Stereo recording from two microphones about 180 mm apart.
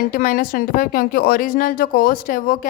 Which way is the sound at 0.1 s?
50° left (ahead or behind).